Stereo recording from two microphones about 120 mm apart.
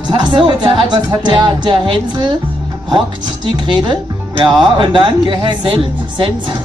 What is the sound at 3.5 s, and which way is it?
Speech, 40° right (ahead or behind).